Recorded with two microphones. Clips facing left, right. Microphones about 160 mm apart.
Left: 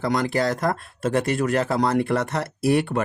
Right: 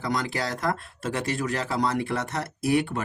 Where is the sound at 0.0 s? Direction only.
55° left (ahead or behind).